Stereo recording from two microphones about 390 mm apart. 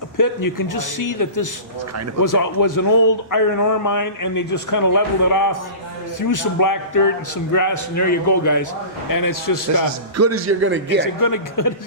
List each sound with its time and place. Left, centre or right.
0.2 s a man's voice: left
9.0 s a man's voice: left
10.2 s a man's voice: right
11.0 s a man's voice: left